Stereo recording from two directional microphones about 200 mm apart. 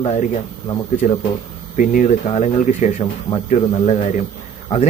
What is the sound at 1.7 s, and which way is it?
Speech, 40° left (ahead or behind).